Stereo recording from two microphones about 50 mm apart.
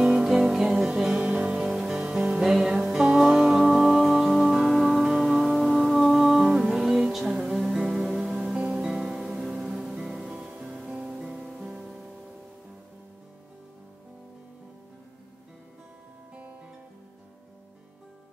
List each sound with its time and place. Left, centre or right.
0.0 s music: centre